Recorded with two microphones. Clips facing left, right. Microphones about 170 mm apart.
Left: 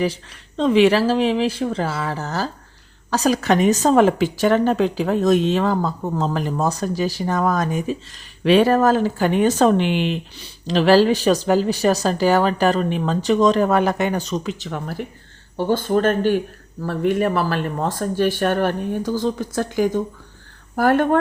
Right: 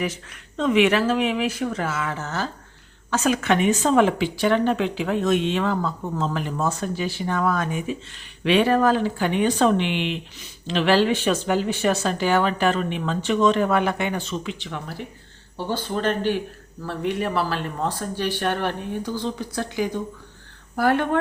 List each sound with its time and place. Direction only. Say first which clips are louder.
0.0 s speech: left 5 dB; 30° left (ahead or behind); by 21.2 s 45° left (ahead or behind)